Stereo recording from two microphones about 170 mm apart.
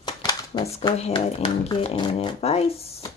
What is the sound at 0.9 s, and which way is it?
Speech, 35° left (ahead or behind).